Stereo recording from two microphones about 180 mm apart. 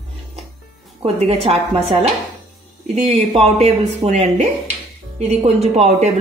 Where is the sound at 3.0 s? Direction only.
35° right (ahead or behind).